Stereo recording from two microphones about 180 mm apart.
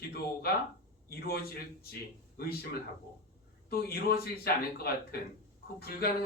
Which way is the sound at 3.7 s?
55° left (ahead or behind).